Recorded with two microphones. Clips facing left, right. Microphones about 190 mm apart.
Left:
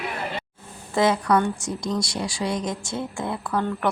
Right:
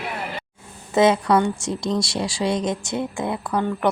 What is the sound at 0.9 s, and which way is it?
Speech, 20° right (ahead or behind).